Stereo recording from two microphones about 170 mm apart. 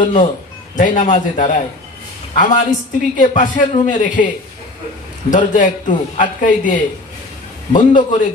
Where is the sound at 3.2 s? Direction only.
50° left (ahead or behind).